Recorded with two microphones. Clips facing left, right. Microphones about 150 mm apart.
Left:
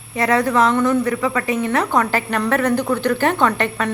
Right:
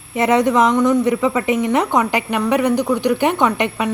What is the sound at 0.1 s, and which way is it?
A woman's voice, 20° right (ahead or behind).